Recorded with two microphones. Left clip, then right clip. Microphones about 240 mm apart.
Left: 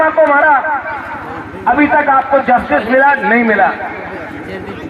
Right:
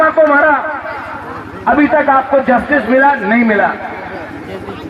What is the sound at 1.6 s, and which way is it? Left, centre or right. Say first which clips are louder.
Speech: even; right.